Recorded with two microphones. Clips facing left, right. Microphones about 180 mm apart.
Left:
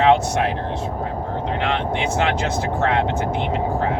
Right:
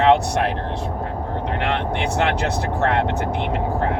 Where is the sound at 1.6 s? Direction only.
60° right (ahead or behind).